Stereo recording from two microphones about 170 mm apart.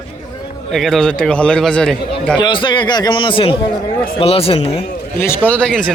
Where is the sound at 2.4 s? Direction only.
25° left (ahead or behind).